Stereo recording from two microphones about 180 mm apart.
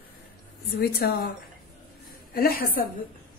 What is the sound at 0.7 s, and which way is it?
Speech, 60° left (ahead or behind).